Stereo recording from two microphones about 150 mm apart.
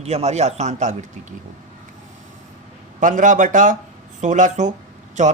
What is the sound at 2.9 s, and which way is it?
Speech, 60° right (ahead or behind).